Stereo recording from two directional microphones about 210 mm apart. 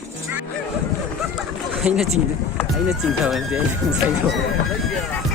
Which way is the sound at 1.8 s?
5° right (ahead or behind).